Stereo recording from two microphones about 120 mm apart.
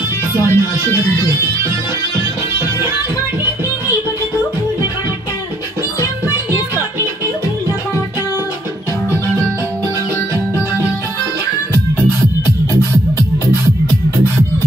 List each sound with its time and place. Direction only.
0.5 s speech: 25° left (ahead or behind)
5.9 s music: 25° left (ahead or behind)